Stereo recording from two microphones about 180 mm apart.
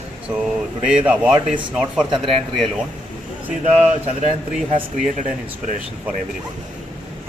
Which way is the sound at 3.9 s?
40° right (ahead or behind).